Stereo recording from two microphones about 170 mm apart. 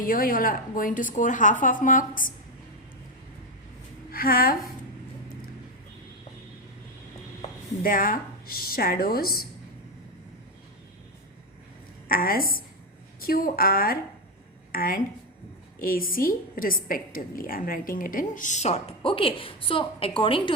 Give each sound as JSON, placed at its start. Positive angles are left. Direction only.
{"t": 0.0, "sound": "a woman's voice", "side_deg": 55}
{"t": 4.1, "sound": "speech", "side_deg": 60}
{"t": 7.8, "sound": "a woman's voice", "side_deg": 55}
{"t": 12.0, "sound": "a woman's voice", "side_deg": 60}